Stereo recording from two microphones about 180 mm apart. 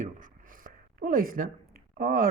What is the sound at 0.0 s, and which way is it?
Speech, 45° right (ahead or behind).